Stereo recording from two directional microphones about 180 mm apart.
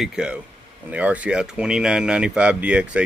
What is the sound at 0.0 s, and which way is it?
Speech, 5° right (ahead or behind).